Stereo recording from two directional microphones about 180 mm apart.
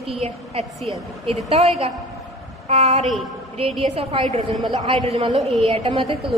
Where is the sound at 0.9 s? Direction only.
35° right (ahead or behind).